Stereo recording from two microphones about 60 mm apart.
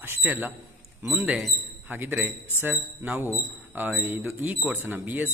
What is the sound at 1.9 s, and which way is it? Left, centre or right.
Speech, right.